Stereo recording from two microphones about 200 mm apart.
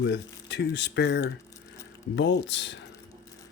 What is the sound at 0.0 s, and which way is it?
Speech, 60° left (ahead or behind).